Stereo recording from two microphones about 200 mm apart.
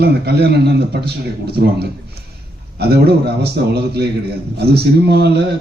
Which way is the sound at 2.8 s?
55° right (ahead or behind).